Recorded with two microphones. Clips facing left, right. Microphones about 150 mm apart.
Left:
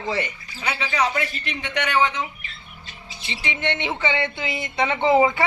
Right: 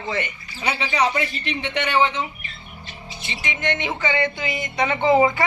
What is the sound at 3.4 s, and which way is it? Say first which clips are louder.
Speech: right 1 dB; 25° left (ahead or behind).